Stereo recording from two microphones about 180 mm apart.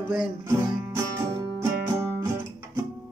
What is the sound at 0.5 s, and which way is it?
Music, 20° right (ahead or behind).